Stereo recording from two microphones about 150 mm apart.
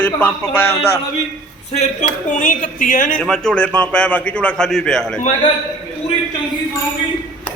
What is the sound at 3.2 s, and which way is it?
A man's voice, 5° left (ahead or behind).